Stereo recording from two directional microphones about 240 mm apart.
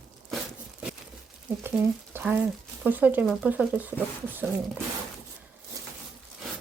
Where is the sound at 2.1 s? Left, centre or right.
Centre.